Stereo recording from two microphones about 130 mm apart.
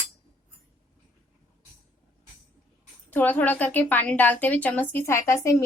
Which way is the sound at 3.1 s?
15° left (ahead or behind).